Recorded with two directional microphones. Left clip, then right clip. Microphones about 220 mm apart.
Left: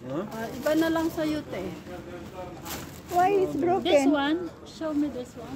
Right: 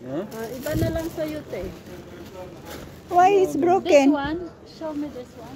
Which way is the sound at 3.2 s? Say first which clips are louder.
Right 6 dB; 30° right (ahead or behind).